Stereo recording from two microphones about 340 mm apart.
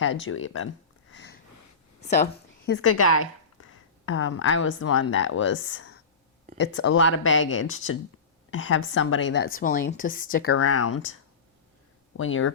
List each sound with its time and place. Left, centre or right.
0.0 s speech: left
1.1 s sniff: left
2.0 s speech: centre
2.6 s a woman's voice: left
10.6 s speech: left
12.1 s speech: left